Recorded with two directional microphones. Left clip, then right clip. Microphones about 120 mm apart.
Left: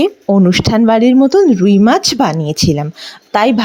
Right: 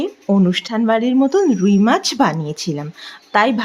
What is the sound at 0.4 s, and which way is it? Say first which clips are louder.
Speech: left 7 dB; 50° left (ahead or behind).